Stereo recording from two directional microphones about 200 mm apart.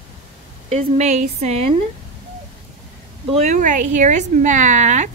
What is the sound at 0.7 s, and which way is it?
Speech, 35° right (ahead or behind).